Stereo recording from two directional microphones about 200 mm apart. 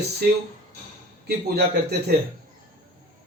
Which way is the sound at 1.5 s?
55° right (ahead or behind).